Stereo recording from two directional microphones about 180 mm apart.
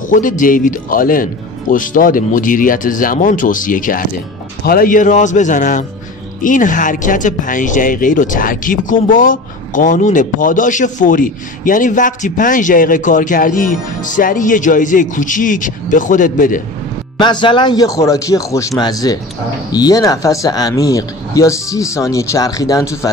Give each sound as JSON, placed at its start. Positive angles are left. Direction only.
{"t": 0.1, "sound": "speech", "side_deg": 45}
{"t": 17.2, "sound": "speech", "side_deg": 25}